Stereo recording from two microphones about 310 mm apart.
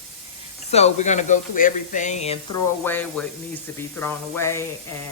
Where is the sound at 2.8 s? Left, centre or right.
Centre.